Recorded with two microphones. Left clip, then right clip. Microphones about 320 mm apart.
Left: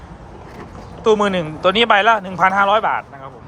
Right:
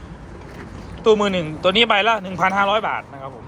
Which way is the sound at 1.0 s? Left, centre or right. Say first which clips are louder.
Left 1 dB; centre.